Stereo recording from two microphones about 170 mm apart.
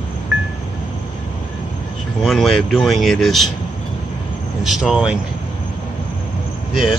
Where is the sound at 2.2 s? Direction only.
Centre (ahead or behind).